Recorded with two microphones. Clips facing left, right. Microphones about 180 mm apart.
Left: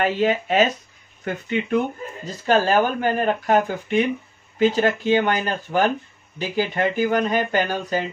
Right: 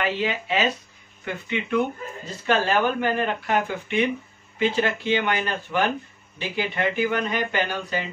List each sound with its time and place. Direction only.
0.0 s speech: 45° left (ahead or behind)